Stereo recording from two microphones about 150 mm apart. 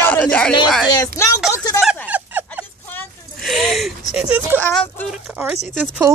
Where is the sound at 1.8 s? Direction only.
5° right (ahead or behind).